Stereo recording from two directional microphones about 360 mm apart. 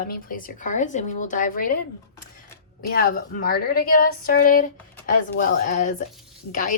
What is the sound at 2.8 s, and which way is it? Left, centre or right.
Speech, left.